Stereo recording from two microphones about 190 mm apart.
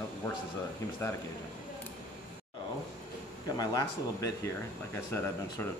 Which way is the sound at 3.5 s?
20° left (ahead or behind).